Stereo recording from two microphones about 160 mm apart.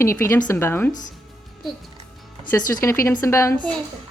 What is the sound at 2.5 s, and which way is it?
A woman's voice, 20° left (ahead or behind).